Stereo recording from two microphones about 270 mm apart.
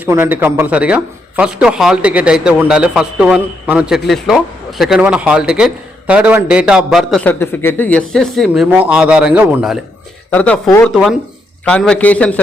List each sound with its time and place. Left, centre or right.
0.0 s a man's voice: centre